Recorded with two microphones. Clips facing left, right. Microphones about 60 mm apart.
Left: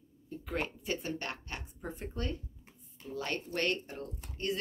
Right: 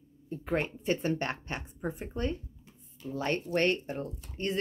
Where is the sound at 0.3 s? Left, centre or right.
Right.